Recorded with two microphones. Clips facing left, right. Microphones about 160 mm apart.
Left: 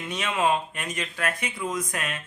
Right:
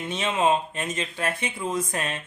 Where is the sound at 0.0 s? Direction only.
25° right (ahead or behind).